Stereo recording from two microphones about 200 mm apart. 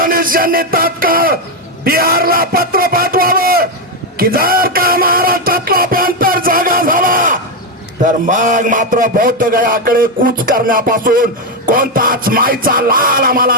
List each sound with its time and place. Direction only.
0.0 s music: 45° right (ahead or behind)
1.8 s a man's voice: 50° right (ahead or behind)
4.2 s music: 45° right (ahead or behind)
8.0 s a sound: 40° right (ahead or behind)